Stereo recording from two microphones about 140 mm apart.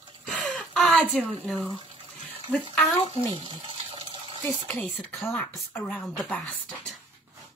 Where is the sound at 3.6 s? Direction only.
45° right (ahead or behind).